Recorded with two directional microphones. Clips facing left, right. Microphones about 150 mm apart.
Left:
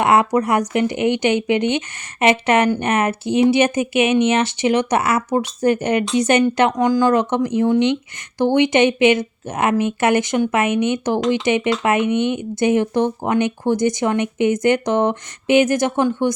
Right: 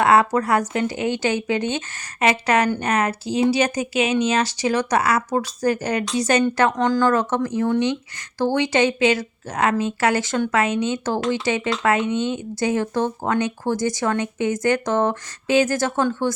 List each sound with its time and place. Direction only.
0.0 s speech: 20° left (ahead or behind)